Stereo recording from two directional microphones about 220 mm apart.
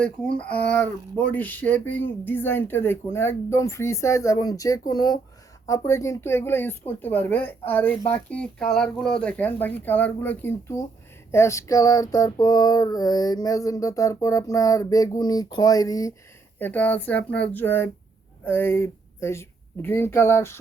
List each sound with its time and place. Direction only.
0.3 s speech: 5° left (ahead or behind)